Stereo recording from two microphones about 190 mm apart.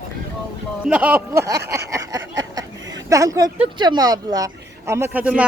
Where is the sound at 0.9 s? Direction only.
5° right (ahead or behind).